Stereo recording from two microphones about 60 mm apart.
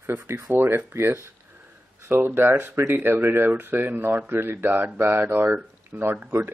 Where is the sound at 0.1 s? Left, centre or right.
Right.